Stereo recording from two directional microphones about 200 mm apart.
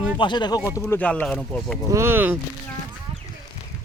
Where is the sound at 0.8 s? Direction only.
5° left (ahead or behind).